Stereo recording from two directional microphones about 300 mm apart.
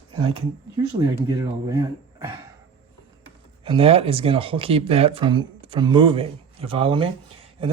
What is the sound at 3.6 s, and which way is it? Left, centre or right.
Speech, centre.